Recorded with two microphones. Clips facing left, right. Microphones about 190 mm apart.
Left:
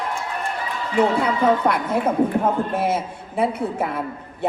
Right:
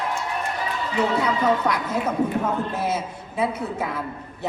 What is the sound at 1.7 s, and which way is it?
Speech, 55° left (ahead or behind).